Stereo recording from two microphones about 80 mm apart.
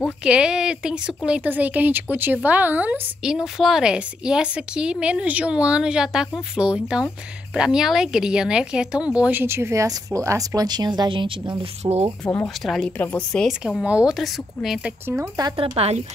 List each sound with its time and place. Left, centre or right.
0.2 s speech: centre
3.3 s speech: centre
9.3 s speech: right
11.8 s speech: right
12.2 s speech: centre
12.9 s a woman's voice: left
13.5 s speech: centre
13.8 s speech: centre
14.1 s speech: centre